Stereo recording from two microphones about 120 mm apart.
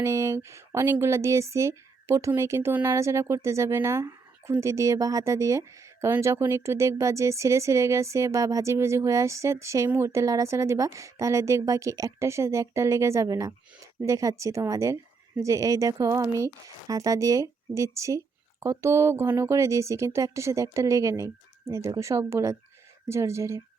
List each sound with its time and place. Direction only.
0.0 s speech: 25° right (ahead or behind)